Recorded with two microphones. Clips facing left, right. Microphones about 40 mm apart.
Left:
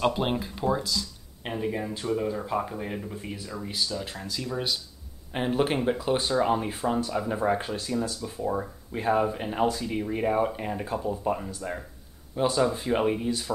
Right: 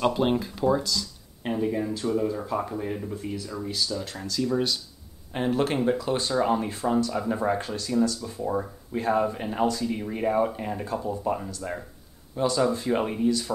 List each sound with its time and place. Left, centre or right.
0.0 s speech: centre
12.4 s speech: left
12.6 s speech: centre